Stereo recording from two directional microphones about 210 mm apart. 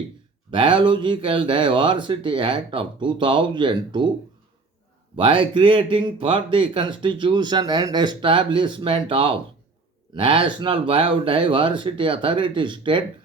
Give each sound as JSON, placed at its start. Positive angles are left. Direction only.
{"t": 0.5, "sound": "speech", "side_deg": -25}
{"t": 5.1, "sound": "speech", "side_deg": -25}